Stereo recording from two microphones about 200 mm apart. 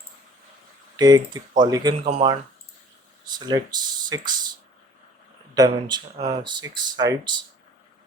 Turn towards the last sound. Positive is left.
turn(degrees=-20)  # may be behind; listen again after turning